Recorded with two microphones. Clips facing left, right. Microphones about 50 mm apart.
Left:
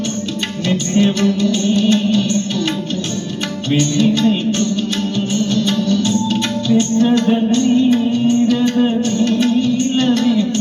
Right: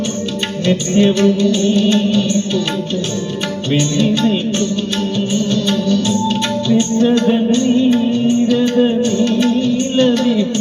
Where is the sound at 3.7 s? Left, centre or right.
Right.